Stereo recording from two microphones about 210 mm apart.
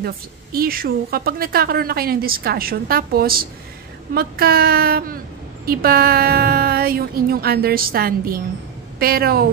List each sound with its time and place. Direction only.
0.0 s a woman's voice: 45° right (ahead or behind)